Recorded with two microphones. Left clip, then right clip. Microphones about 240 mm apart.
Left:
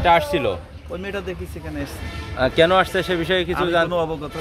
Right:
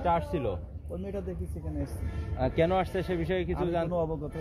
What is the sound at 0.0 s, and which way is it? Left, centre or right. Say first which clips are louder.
Speech: left 12 dB; left.